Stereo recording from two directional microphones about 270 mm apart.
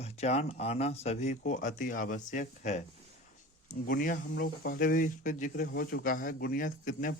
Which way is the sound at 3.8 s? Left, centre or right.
Left.